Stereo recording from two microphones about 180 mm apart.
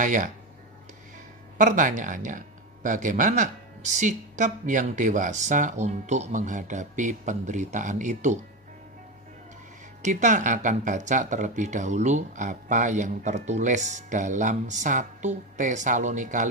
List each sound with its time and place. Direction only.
0.0 s speech: 45° right (ahead or behind)
1.6 s speech: 45° right (ahead or behind)
10.0 s speech: 45° right (ahead or behind)